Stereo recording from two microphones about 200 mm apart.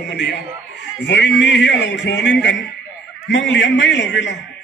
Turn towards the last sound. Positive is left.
turn(degrees=65)  # may be behind; listen again after turning